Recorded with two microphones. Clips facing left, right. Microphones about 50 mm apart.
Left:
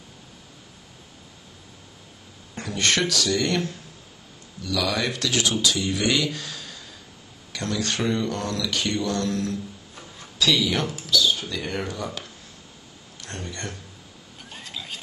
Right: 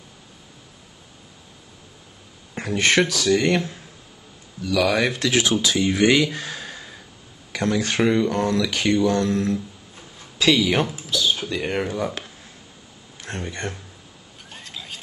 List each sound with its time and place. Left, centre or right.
2.6 s speech: right
10.8 s speech: centre
11.1 s speech: right
14.5 s zipper: centre